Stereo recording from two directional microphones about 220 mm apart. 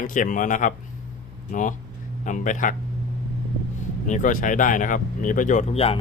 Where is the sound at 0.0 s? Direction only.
35° left (ahead or behind).